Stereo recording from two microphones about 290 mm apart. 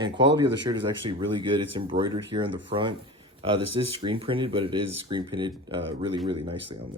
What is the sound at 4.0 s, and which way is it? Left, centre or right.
Speech, centre.